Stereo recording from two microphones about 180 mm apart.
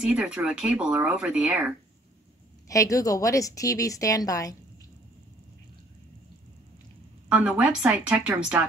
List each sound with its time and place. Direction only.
0.0 s speech: 5° right (ahead or behind)
2.7 s a woman's voice: 20° left (ahead or behind)
7.2 s speech: 5° right (ahead or behind)